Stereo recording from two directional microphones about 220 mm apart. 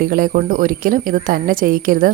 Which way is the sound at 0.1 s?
40° right (ahead or behind).